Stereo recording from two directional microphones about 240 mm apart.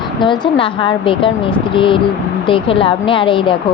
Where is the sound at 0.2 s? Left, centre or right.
Centre.